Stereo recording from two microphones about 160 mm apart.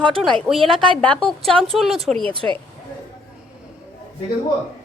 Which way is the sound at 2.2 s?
35° right (ahead or behind).